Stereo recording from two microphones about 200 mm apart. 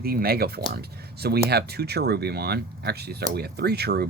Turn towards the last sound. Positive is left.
turn(degrees=-55)  # may be behind; listen again after turning